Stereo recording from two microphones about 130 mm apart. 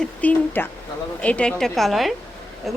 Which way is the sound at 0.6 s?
15° left (ahead or behind).